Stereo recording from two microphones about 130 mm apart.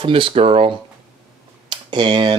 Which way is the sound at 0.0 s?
45° right (ahead or behind).